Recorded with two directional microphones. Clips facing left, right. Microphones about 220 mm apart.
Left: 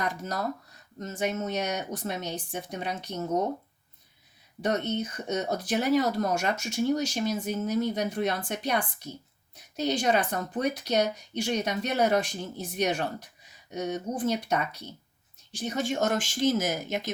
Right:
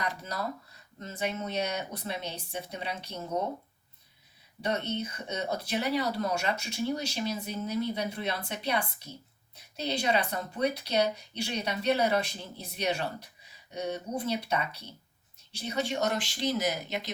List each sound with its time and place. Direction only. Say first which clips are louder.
0.0 s speech: left 4 dB; 45° left (ahead or behind)
4.6 s speech: left 4 dB; 45° left (ahead or behind)